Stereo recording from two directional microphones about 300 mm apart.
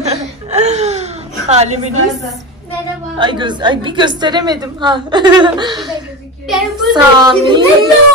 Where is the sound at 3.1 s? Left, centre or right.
Centre.